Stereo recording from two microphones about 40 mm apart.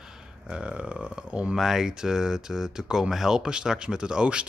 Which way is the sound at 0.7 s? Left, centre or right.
Right.